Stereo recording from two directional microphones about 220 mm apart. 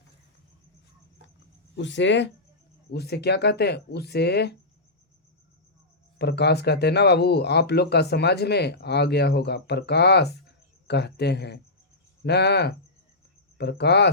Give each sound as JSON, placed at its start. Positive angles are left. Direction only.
{"t": 1.7, "sound": "speech", "side_deg": 55}
{"t": 6.1, "sound": "speech", "side_deg": 50}